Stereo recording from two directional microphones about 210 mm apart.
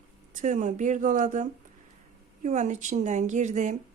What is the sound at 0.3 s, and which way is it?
Speech, 35° right (ahead or behind).